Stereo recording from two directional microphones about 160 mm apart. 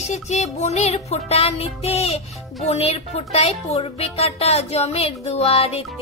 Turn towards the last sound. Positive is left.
turn(degrees=40)  # may be behind; listen again after turning